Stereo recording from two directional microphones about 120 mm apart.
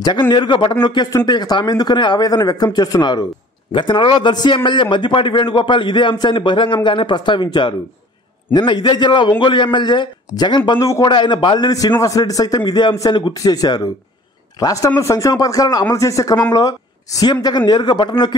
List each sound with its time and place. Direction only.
0.3 s a man's voice: 40° left (ahead or behind)
10.8 s speech: 30° left (ahead or behind)
11.1 s a man's voice: 40° left (ahead or behind)